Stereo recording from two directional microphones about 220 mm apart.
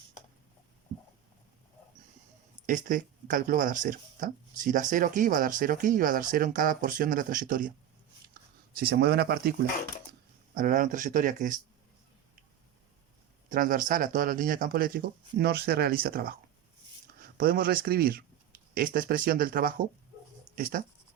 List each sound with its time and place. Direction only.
2.6 s speech: 35° right (ahead or behind)
13.5 s speech: 40° right (ahead or behind)